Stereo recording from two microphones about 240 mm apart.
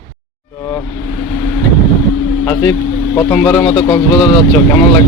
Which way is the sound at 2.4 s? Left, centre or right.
Centre.